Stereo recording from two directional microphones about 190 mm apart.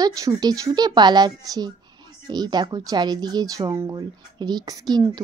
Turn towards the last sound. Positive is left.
turn(degrees=-20)  # may be behind; listen again after turning